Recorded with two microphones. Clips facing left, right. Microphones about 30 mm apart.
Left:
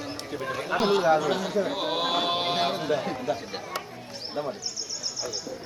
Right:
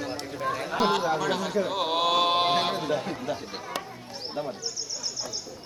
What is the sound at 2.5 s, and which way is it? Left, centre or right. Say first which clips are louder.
Speech: even; centre.